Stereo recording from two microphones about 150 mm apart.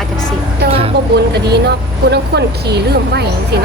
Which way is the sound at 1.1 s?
90° right.